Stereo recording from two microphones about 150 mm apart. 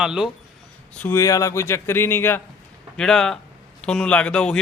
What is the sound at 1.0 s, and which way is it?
A man's voice, 15° left (ahead or behind).